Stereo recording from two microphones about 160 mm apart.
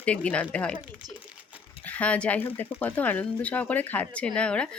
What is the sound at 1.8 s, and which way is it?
Speech, 10° left (ahead or behind).